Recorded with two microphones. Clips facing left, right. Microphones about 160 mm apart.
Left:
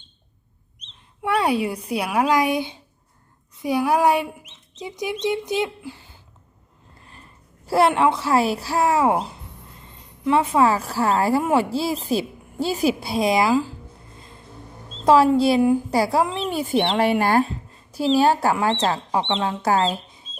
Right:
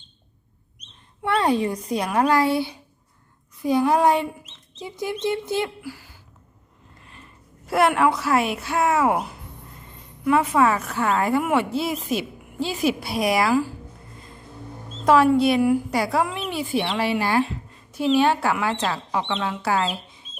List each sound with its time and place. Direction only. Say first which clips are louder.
1.2 s a child's voice: even; 10° left (ahead or behind)
7.0 s a sound: even; 35° left (ahead or behind)
7.7 s a woman's voice: left 1 dB; 30° left (ahead or behind)
15.0 s a woman's voice: left 1 dB; 30° left (ahead or behind)
16.5 s speech: left 3 dB; 45° left (ahead or behind)
17.9 s a woman's voice: left 1 dB; 35° left (ahead or behind)